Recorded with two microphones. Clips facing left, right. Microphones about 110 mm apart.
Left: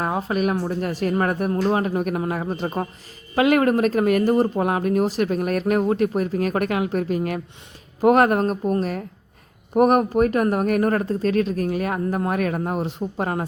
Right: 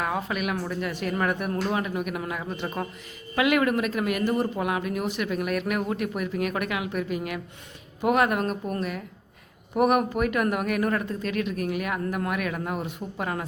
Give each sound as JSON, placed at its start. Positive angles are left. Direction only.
{"t": 0.0, "sound": "speech", "side_deg": 35}